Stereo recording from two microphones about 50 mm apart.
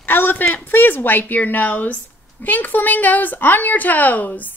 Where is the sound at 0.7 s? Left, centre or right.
Left.